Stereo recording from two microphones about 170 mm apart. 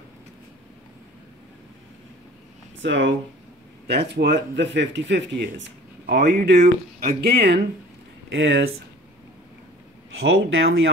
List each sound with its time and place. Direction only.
2.8 s speech: 90° right
3.8 s speech: 75° right (ahead or behind)
7.2 s speech: 75° right (ahead or behind)
8.3 s speech: 90° right
10.2 s speech: 90° right